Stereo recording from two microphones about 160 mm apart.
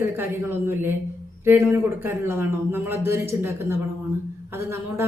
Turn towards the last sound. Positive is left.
turn(degrees=-15)  # may be behind; listen again after turning